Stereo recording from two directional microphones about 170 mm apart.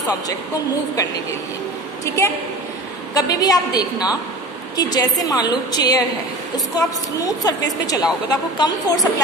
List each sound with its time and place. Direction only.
2.0 s a woman's voice: 15° left (ahead or behind)